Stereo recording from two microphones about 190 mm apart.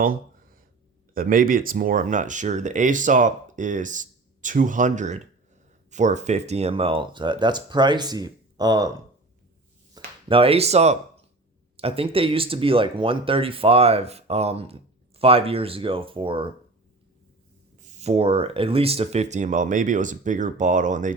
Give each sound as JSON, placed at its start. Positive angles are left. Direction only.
{"t": 0.0, "sound": "a sound", "side_deg": -50}
{"t": 1.1, "sound": "speech", "side_deg": -50}
{"t": 9.9, "sound": "speech", "side_deg": -30}
{"t": 17.8, "sound": "speech", "side_deg": -35}